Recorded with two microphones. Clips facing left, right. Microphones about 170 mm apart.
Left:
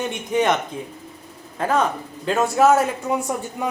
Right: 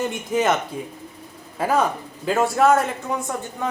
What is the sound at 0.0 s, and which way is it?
Speech, centre (ahead or behind).